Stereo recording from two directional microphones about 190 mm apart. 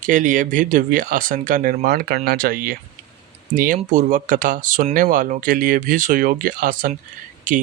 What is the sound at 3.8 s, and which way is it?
Speech, 40° right (ahead or behind).